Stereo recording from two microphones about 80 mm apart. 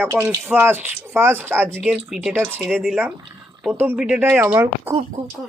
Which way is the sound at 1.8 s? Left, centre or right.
Centre.